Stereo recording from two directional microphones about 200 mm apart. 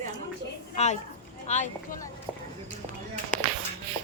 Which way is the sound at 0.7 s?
35° left (ahead or behind).